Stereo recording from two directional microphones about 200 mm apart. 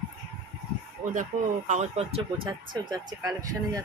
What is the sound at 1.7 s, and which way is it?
Speech, 30° right (ahead or behind).